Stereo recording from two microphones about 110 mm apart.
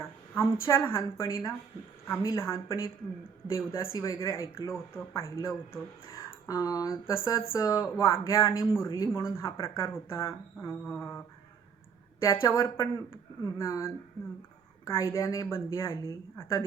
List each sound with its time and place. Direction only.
0.0 s speech: 25° left (ahead or behind)
10.8 s a sound: 10° left (ahead or behind)
12.2 s speech: 25° left (ahead or behind)